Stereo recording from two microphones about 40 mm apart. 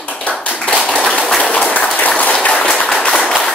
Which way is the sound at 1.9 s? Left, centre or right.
Left.